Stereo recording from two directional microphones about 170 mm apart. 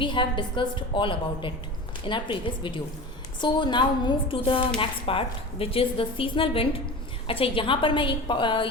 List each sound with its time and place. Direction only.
0.0 s a woman's voice: 30° left (ahead or behind)